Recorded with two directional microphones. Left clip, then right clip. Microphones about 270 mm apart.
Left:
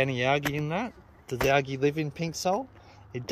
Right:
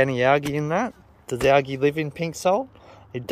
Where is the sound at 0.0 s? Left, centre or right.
Centre.